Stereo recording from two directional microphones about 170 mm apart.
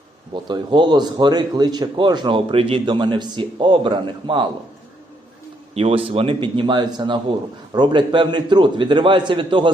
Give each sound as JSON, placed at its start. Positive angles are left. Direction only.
{"t": 0.4, "sound": "speech", "side_deg": -25}
{"t": 5.7, "sound": "speech", "side_deg": -35}